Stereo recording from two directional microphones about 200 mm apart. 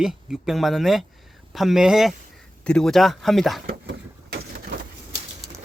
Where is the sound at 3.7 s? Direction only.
55° right (ahead or behind).